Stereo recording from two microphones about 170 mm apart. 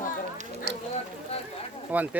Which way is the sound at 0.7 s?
90° right.